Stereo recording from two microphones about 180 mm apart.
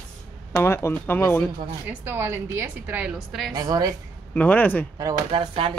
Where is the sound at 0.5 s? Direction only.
15° left (ahead or behind).